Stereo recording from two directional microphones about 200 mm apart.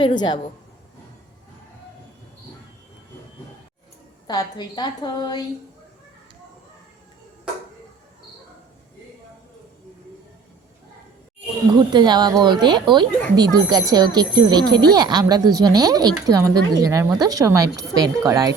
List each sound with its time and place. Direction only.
0.0 s a woman's voice: 20° left (ahead or behind)
4.3 s a woman's voice: 20° left (ahead or behind)
11.3 s speech: 20° right (ahead or behind)